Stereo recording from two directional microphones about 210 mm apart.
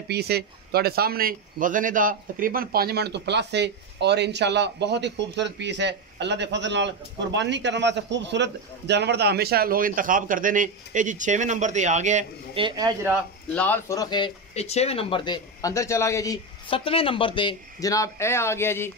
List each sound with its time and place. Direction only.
0.1 s a man's voice: 50° right (ahead or behind)
12.6 s a man's voice: 20° right (ahead or behind)
13.5 s speech: 10° left (ahead or behind)